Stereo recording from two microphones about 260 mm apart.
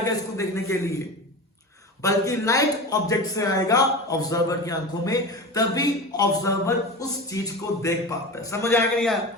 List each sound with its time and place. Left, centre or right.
0.0 s speech: centre